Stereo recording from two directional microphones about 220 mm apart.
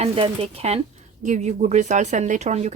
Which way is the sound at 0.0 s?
30° right (ahead or behind).